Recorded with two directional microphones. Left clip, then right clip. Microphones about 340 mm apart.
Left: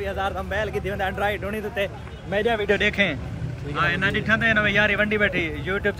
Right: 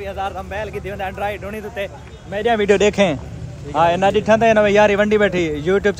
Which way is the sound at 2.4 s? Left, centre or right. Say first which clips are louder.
Right 7 dB; right.